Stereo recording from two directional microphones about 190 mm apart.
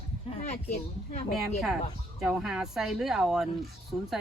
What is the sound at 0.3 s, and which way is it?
Speech, 35° left (ahead or behind).